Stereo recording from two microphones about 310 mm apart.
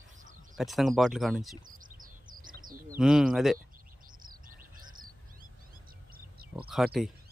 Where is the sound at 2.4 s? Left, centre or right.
Right.